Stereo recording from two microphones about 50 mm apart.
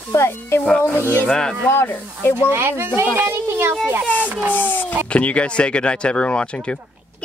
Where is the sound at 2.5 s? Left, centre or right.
Right.